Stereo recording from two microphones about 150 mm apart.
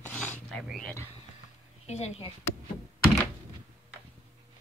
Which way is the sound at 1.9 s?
45° left (ahead or behind).